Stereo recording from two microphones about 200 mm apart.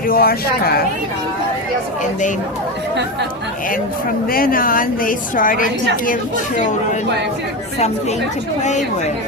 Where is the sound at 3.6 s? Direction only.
45° left (ahead or behind).